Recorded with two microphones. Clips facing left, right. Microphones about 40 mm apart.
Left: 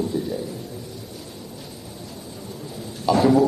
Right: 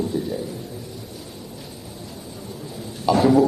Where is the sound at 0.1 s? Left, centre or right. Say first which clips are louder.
Even; centre.